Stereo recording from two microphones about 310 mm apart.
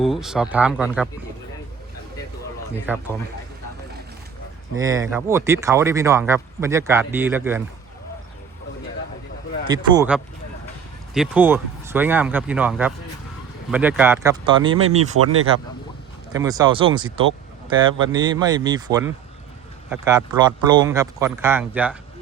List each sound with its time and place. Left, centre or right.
0.0 s speech: centre
2.9 s speech: centre
4.7 s speech: centre
9.6 s speech: centre
15.2 s speech: right
16.3 s speech: centre